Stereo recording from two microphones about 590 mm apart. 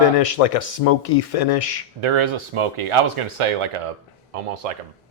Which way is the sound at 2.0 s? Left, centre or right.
Right.